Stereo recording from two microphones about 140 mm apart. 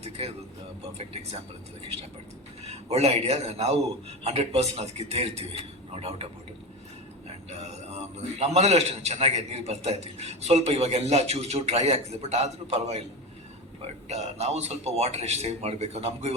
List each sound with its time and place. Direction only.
0.0 s a sound: 45° right (ahead or behind)
0.8 s a man's voice: 45° right (ahead or behind)
2.6 s a man's voice: 50° right (ahead or behind)
7.5 s a sound: 50° right (ahead or behind)
8.4 s a man's voice: 50° right (ahead or behind)
14.1 s a man's voice: 50° right (ahead or behind)